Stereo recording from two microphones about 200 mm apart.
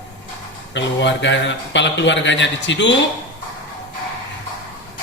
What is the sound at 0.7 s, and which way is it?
A man's voice, 60° left (ahead or behind).